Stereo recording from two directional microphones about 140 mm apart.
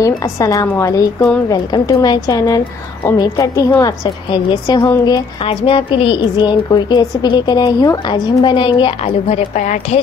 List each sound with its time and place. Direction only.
0.0 s a woman's voice: 25° left (ahead or behind)
5.4 s a woman's voice: 40° left (ahead or behind)
9.6 s a woman's voice: 60° left (ahead or behind)